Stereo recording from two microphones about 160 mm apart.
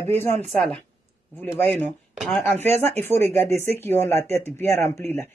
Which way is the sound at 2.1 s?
5° left (ahead or behind).